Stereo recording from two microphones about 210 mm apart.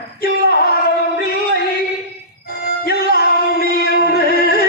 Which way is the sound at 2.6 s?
45° left (ahead or behind).